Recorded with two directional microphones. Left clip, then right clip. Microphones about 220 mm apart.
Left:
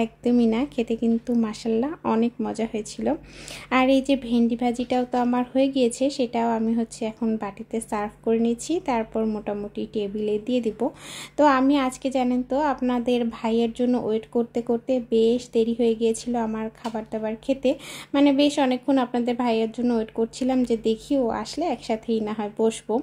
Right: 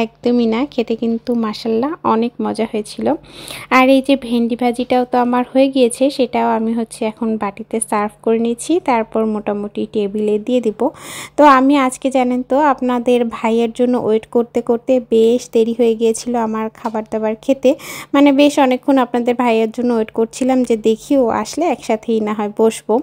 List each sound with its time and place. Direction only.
0.0 s speech: 15° right (ahead or behind)